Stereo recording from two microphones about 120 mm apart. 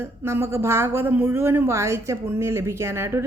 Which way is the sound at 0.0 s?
20° right (ahead or behind).